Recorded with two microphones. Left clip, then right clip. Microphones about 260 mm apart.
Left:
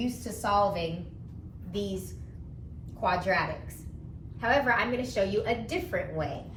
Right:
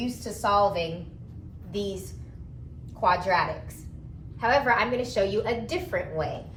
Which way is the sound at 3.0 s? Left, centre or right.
Right.